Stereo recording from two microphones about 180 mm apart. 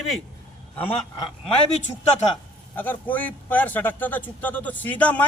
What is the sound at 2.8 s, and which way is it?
A man's voice, 10° left (ahead or behind).